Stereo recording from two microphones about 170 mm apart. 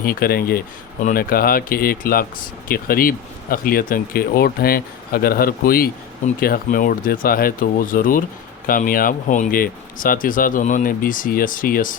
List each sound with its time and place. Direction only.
0.0 s speech: 60° left (ahead or behind)